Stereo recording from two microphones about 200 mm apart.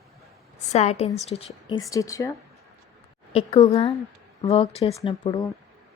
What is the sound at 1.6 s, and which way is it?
Speech, 20° left (ahead or behind).